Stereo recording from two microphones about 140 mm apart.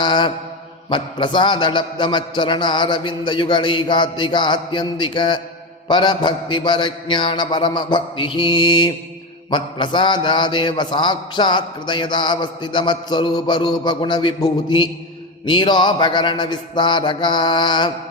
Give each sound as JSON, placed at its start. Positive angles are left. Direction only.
{"t": 0.0, "sound": "mantra", "side_deg": 35}